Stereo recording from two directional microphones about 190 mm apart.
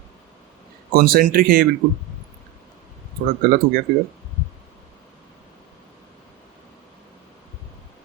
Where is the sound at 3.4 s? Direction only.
60° right (ahead or behind).